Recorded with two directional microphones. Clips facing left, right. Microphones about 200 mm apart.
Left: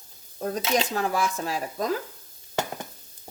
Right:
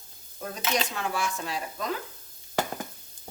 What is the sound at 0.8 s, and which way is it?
Speech, 40° left (ahead or behind).